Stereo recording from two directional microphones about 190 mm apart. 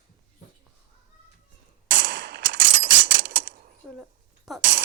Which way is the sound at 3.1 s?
70° right (ahead or behind).